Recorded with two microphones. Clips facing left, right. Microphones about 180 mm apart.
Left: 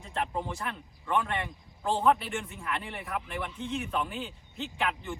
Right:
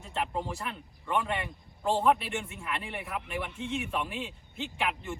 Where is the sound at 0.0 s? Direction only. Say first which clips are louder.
Even; centre (ahead or behind).